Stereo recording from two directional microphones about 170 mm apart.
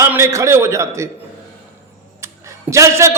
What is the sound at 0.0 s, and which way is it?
A man's voice, 15° right (ahead or behind).